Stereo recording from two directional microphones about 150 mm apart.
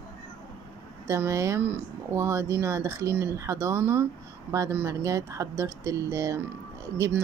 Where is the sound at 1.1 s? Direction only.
20° right (ahead or behind).